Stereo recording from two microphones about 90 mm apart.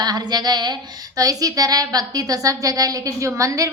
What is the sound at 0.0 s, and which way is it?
A woman's voice, 50° right (ahead or behind).